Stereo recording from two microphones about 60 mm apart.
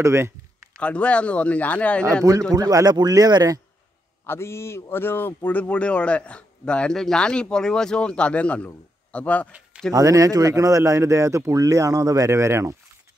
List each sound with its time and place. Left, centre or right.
0.0 s speech: right
0.7 s speech: left
2.3 s a man's voice: right
4.3 s speech: left
9.9 s speech: right